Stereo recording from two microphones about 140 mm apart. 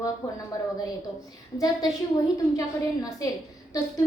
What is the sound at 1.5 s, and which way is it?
A woman's voice, 25° left (ahead or behind).